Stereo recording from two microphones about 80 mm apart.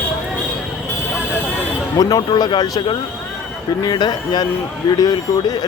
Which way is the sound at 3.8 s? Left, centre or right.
Left.